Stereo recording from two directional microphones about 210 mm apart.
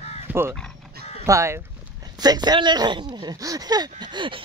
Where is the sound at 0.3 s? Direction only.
10° right (ahead or behind).